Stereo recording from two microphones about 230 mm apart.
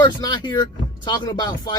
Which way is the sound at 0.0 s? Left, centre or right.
Centre.